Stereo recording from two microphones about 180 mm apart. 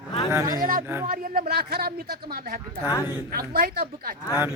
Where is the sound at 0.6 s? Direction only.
50° right (ahead or behind).